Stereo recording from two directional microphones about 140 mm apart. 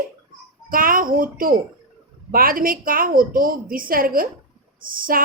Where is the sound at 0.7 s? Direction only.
90° right.